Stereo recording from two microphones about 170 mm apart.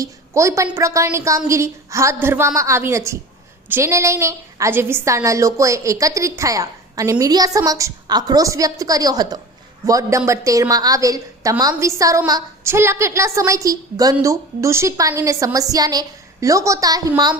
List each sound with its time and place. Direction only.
0.0 s a woman's voice: 20° right (ahead or behind)